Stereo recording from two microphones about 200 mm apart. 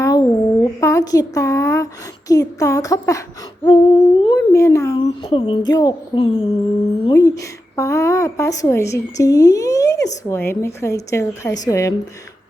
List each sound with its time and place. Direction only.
0.0 s speech: 20° left (ahead or behind)
4.9 s music: 25° left (ahead or behind)
7.0 s a woman's voice: 15° left (ahead or behind)